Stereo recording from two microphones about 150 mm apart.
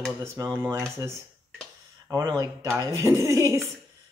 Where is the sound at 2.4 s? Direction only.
20° right (ahead or behind).